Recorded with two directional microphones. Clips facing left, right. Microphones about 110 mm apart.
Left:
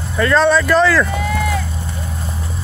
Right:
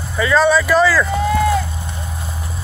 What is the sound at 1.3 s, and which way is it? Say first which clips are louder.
Vehicle: right 4 dB; 20° right (ahead or behind).